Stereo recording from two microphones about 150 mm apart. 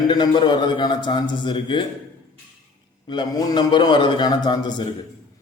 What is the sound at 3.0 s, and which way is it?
A man's voice, 30° left (ahead or behind).